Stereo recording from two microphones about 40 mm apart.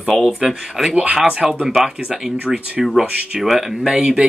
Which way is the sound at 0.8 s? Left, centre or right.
Centre.